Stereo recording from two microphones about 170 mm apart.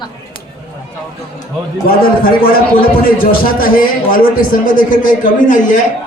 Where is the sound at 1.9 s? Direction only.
60° left (ahead or behind).